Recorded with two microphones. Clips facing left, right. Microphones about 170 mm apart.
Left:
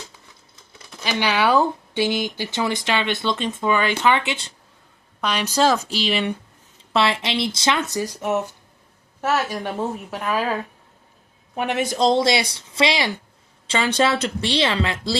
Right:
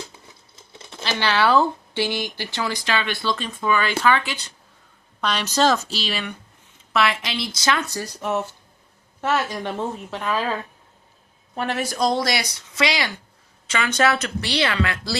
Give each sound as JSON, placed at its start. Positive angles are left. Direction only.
{"t": 0.7, "sound": "a sound", "side_deg": -25}
{"t": 1.0, "sound": "speech", "side_deg": 15}
{"t": 5.2, "sound": "a woman's voice", "side_deg": 10}